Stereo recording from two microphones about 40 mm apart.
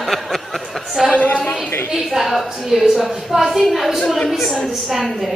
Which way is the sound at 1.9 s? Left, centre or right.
Centre.